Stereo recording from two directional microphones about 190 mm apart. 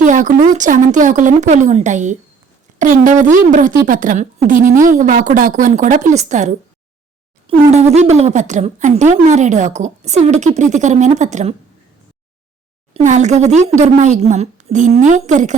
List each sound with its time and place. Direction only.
0.0 s speech: 45° right (ahead or behind)
12.9 s speech: 40° right (ahead or behind)